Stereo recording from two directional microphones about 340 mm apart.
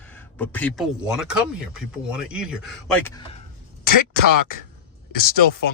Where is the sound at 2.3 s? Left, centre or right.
Centre.